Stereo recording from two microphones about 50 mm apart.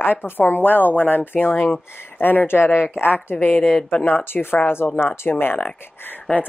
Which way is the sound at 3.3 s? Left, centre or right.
Left.